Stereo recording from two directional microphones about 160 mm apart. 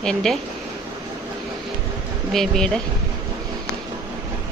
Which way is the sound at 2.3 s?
5° left (ahead or behind).